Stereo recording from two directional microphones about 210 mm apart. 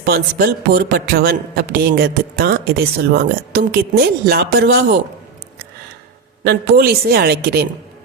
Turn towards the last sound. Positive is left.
turn(degrees=-50)  # may be behind; listen again after turning